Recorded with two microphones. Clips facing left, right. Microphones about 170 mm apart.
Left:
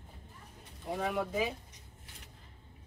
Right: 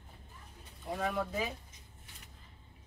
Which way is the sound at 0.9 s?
15° left (ahead or behind).